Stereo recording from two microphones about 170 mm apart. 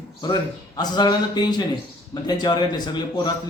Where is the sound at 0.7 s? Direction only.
25° left (ahead or behind).